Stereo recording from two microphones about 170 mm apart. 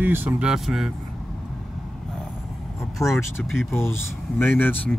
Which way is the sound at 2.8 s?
15° left (ahead or behind).